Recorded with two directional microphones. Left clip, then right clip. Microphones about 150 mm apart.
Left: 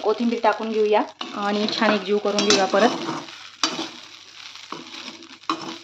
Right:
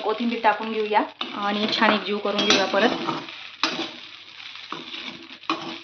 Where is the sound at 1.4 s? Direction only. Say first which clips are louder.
Even; 45° left (ahead or behind).